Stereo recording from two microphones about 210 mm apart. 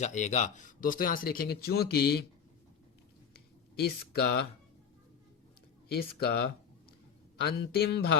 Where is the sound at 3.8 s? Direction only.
50° left (ahead or behind).